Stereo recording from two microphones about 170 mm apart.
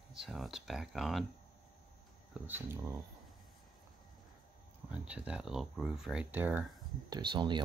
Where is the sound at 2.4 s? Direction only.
10° right (ahead or behind).